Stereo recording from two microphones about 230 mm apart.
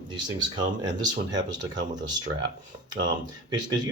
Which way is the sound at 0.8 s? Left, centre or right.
Centre.